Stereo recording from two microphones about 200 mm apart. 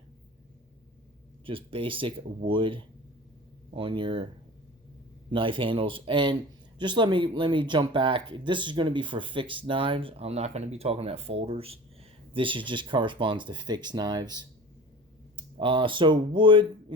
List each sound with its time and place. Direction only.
1.5 s speech: 25° right (ahead or behind)
5.3 s speech: 25° right (ahead or behind)